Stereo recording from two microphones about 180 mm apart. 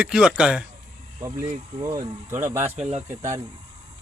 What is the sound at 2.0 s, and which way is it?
Speech, 15° right (ahead or behind).